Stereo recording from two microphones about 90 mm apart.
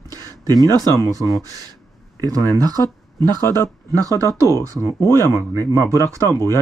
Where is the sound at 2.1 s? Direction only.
45° right (ahead or behind).